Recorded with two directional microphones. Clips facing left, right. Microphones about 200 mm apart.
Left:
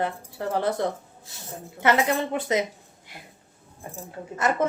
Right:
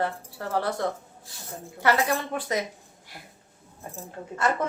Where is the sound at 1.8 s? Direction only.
20° left (ahead or behind).